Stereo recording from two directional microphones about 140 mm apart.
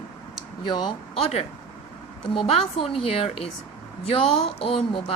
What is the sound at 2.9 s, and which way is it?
A woman's voice, 45° left (ahead or behind).